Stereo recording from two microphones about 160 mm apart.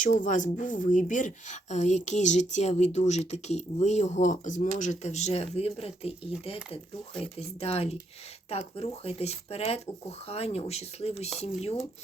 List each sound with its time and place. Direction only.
0.0 s speech: 50° left (ahead or behind)